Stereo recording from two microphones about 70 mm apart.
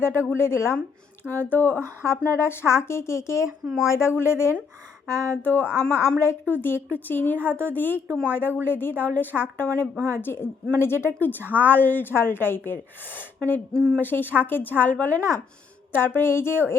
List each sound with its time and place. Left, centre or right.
0.0 s a woman's voice: left